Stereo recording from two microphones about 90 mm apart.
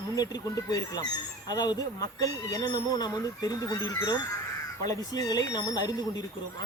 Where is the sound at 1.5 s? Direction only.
50° left (ahead or behind).